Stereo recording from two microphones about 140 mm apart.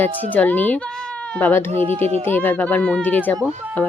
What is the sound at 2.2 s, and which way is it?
Speech, 15° left (ahead or behind).